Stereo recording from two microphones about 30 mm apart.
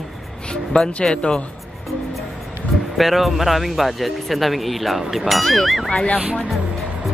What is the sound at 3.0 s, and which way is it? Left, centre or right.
Speech, centre.